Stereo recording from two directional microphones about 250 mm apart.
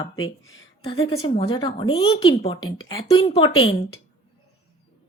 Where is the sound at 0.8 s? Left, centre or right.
Left.